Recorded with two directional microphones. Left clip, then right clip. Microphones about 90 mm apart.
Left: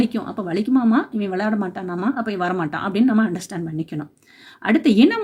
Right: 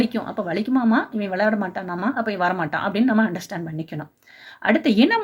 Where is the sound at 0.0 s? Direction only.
30° left (ahead or behind).